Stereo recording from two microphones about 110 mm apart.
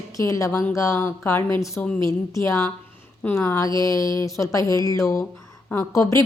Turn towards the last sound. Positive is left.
turn(degrees=30)  # may be behind; listen again after turning